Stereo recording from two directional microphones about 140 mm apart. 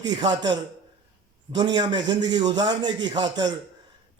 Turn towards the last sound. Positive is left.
turn(degrees=-30)  # may be behind; listen again after turning